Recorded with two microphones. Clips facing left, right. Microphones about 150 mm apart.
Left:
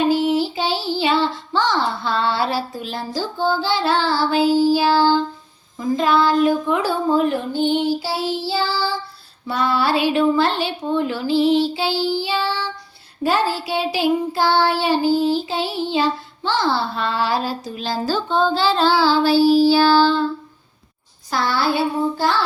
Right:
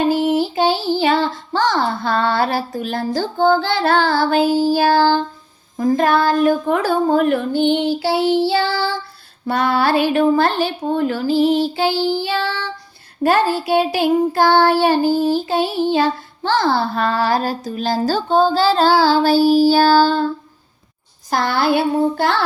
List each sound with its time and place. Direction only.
0.1 s child singing: 50° right (ahead or behind)
5.7 s a woman's voice: 50° right (ahead or behind)
9.5 s child singing: 55° right (ahead or behind)
22.2 s a woman's voice: 60° right (ahead or behind)